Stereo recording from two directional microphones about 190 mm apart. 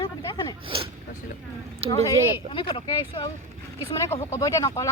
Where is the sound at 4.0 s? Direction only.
15° left (ahead or behind).